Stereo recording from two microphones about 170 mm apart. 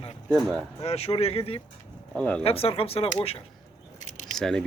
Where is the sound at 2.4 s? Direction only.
35° left (ahead or behind).